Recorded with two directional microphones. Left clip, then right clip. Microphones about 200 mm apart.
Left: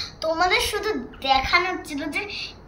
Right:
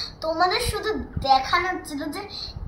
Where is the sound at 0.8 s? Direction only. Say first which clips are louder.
Left 1 dB; 30° left (ahead or behind).